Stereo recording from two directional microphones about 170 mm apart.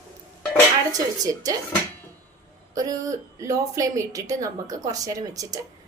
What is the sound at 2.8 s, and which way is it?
Speech, 20° right (ahead or behind).